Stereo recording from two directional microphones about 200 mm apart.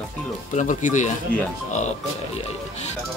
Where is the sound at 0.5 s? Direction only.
40° left (ahead or behind).